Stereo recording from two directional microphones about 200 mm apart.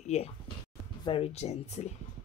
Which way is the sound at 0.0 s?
35° left (ahead or behind).